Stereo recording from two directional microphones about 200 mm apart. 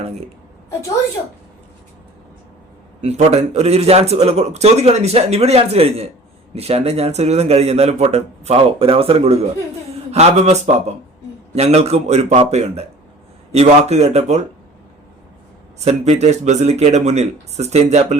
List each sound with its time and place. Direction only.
3.0 s a man's voice: 35° right (ahead or behind)
15.8 s a man's voice: 35° right (ahead or behind)